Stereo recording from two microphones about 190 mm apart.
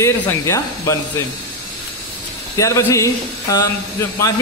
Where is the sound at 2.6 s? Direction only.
15° left (ahead or behind).